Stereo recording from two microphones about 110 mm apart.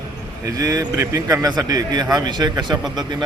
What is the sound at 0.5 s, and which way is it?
A man's voice, 35° right (ahead or behind).